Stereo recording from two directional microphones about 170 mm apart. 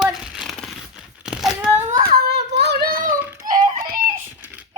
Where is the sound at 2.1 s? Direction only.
70° right (ahead or behind).